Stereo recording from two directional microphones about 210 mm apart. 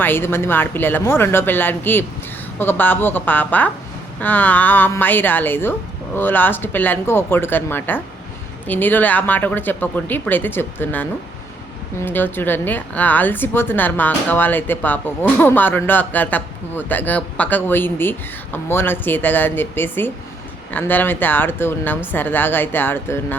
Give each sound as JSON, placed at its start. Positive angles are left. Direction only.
{"t": 0.0, "sound": "speech", "side_deg": 10}